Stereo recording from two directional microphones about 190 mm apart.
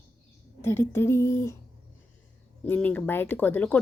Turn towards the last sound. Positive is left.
turn(degrees=10)  # may be behind; listen again after turning